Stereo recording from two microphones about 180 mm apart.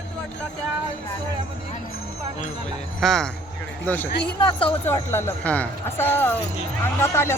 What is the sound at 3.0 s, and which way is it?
Speech, centre (ahead or behind).